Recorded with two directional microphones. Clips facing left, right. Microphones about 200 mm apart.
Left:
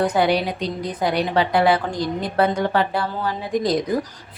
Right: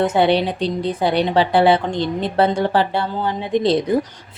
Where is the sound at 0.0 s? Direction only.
25° right (ahead or behind).